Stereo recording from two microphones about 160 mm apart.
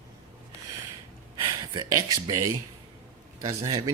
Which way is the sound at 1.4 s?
25° right (ahead or behind).